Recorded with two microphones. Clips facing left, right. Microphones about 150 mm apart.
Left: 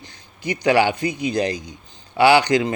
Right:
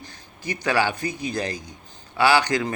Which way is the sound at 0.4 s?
20° left (ahead or behind).